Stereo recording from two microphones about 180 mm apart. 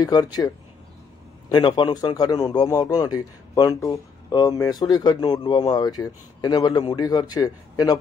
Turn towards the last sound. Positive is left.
turn(degrees=20)  # may be behind; listen again after turning